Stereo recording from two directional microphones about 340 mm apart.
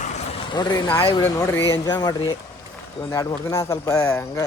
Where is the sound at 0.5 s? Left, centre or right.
Centre.